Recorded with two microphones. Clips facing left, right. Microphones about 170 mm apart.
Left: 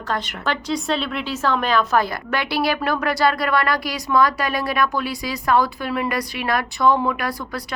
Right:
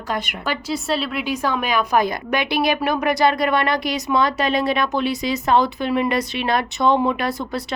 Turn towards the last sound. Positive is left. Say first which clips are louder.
# right 1 dB
turn(degrees=-25)  # may be behind; listen again after turning